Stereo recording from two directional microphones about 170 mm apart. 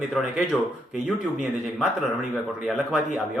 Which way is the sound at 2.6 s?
Centre (ahead or behind).